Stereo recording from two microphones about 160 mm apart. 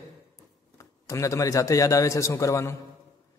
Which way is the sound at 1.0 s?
20° left (ahead or behind).